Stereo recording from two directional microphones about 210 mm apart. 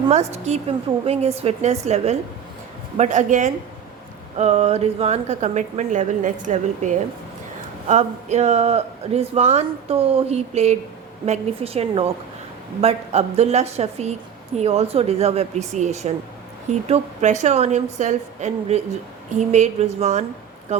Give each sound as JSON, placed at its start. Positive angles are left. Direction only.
{"t": 0.1, "sound": "a woman's voice", "side_deg": -30}